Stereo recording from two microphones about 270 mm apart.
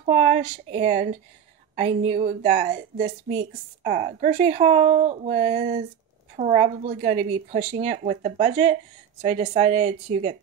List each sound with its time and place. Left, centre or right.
0.0 s a woman's voice: right